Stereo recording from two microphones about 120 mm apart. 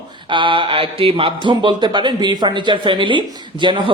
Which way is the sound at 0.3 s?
45° right (ahead or behind).